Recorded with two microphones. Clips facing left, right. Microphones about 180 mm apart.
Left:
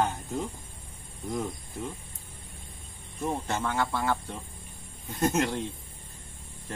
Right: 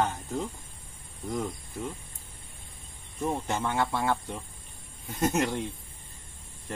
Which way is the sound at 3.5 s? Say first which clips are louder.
Even; 20° right (ahead or behind).